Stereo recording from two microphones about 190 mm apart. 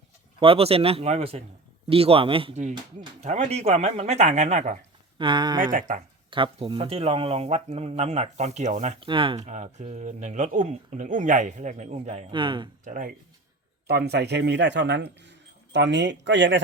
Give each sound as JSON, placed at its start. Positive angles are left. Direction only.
{"t": 0.3, "sound": "speech", "side_deg": -30}
{"t": 5.1, "sound": "speech", "side_deg": -25}
{"t": 9.0, "sound": "speech", "side_deg": -25}
{"t": 9.5, "sound": "speech", "side_deg": -40}
{"t": 12.8, "sound": "speech", "side_deg": -45}
{"t": 13.8, "sound": "speech", "side_deg": -60}